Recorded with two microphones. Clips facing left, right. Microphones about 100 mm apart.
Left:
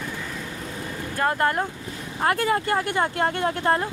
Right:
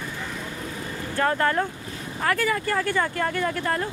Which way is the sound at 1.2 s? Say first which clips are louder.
Even; 20° left (ahead or behind).